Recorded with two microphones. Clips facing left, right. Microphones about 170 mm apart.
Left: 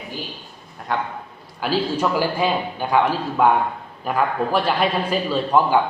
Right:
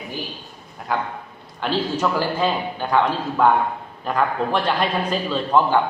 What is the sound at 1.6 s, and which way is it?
A man's voice, 10° left (ahead or behind).